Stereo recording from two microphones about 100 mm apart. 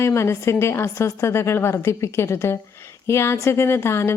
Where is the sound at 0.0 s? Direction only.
25° left (ahead or behind).